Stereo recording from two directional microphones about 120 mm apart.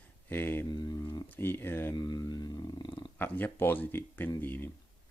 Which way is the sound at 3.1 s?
15° left (ahead or behind).